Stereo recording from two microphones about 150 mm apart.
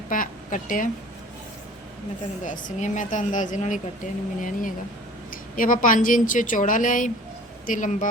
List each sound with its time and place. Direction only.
0.1 s a woman's voice: 65° left (ahead or behind)
2.4 s a woman's voice: 60° left (ahead or behind)